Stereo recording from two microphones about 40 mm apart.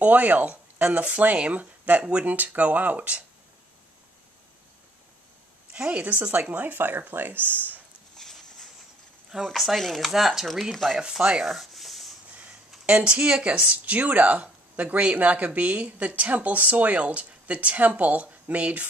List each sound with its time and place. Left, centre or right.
0.0 s speech: right
2.2 s speech: right
5.7 s speech: right
8.2 s a sound: centre
9.3 s speech: centre
9.8 s speech: centre
10.7 s speech: centre
11.0 s a sound: centre
11.4 s a sound: centre
12.8 s speech: right